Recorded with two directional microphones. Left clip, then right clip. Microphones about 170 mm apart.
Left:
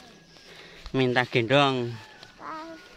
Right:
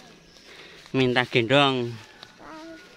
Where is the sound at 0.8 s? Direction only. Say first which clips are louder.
Right 2 dB; 5° right (ahead or behind).